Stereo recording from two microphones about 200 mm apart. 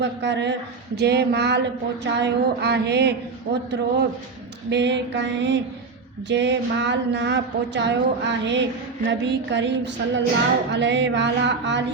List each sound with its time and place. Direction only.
0.0 s speech: 60° right (ahead or behind)
4.7 s speech: 60° right (ahead or behind)